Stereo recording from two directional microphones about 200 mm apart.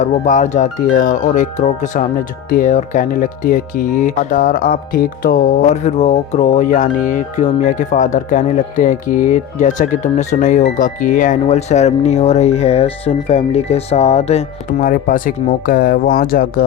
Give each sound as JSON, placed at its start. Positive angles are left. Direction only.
{"t": 0.0, "sound": "speech", "side_deg": 40}
{"t": 14.8, "sound": "speech", "side_deg": 45}